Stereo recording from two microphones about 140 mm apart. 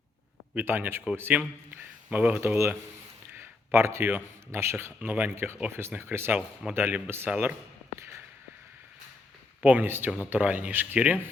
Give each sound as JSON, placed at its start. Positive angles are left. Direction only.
{"t": 0.5, "sound": "a man's voice", "side_deg": -15}
{"t": 7.9, "sound": "a sound", "side_deg": -20}
{"t": 9.6, "sound": "a man's voice", "side_deg": -10}